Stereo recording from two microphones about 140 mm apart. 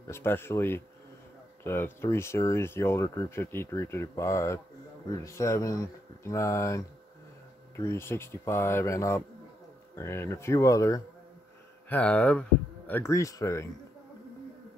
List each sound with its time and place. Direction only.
0.0 s speech: 15° left (ahead or behind)
11.9 s speech: 10° left (ahead or behind)